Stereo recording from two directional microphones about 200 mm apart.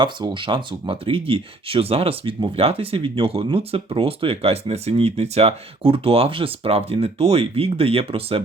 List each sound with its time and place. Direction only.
0.0 s speech: 25° right (ahead or behind)